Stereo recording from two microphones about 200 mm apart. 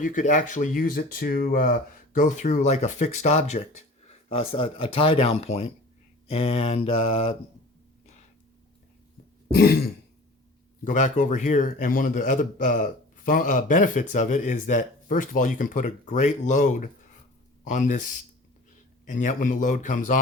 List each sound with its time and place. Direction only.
0.0 s a man's voice: 40° left (ahead or behind)
6.2 s mantra: 30° left (ahead or behind)
9.6 s speech: 50° left (ahead or behind)
10.8 s a man's voice: 40° left (ahead or behind)
19.0 s a man's voice: 40° left (ahead or behind)